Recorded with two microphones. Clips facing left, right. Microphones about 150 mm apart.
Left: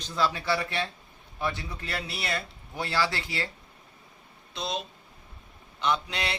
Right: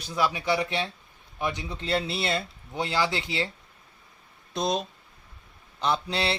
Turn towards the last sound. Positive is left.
turn(degrees=-30)  # may be behind; listen again after turning